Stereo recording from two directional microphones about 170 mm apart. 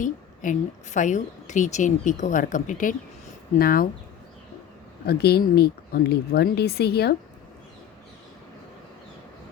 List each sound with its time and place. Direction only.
0.0 s a woman's voice: 50° left (ahead or behind)
3.6 s speech: 60° left (ahead or behind)
5.0 s speech: 70° left (ahead or behind)